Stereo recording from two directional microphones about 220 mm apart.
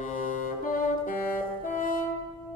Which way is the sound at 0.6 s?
40° left (ahead or behind).